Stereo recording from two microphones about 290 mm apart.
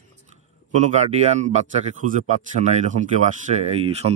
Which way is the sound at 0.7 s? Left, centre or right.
Right.